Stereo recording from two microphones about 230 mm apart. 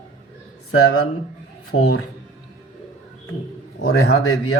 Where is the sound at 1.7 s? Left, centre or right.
Left.